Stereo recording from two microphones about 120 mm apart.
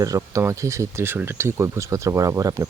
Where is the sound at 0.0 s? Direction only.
25° right (ahead or behind).